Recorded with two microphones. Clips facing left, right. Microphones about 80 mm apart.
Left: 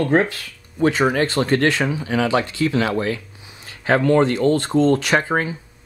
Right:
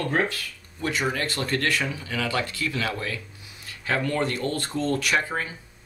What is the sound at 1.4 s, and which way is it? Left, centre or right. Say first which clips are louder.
Speech: left 9 dB; left.